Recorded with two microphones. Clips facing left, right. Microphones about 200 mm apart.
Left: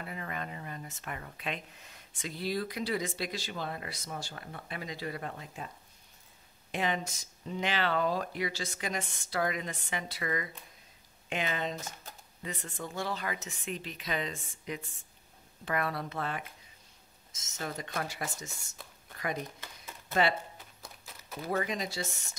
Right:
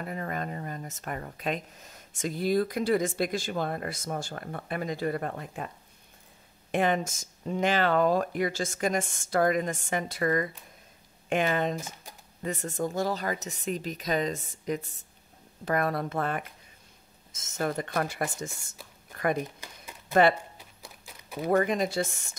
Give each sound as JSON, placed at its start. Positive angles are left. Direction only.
{"t": 0.0, "sound": "speech", "side_deg": -45}
{"t": 6.7, "sound": "speech", "side_deg": -50}
{"t": 20.1, "sound": "speech", "side_deg": -50}
{"t": 20.5, "sound": "a sound", "side_deg": -15}
{"t": 21.5, "sound": "speech", "side_deg": -55}